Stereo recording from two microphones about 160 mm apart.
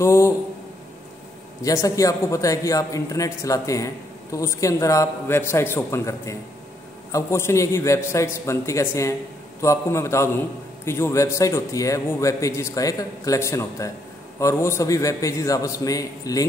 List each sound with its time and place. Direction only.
0.0 s a man's voice: 15° left (ahead or behind)
1.6 s a man's voice: 20° left (ahead or behind)